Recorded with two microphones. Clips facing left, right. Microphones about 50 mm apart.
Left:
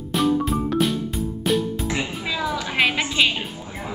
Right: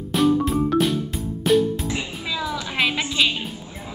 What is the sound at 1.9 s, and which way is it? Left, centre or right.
Music, left.